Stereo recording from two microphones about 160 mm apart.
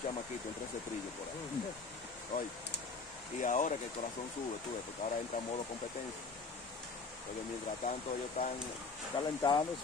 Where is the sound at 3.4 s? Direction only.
50° left (ahead or behind).